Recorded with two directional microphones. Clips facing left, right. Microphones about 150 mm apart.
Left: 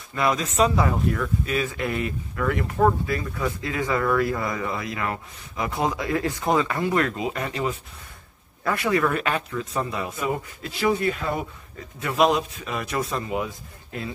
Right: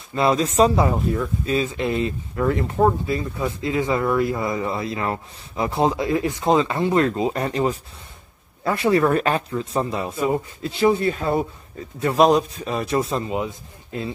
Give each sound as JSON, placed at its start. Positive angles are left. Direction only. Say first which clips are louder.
{"t": 0.1, "sound": "speech", "louder": "right 5 dB", "side_deg": -30}